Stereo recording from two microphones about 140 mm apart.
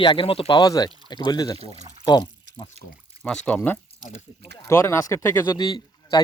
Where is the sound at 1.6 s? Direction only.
50° right (ahead or behind).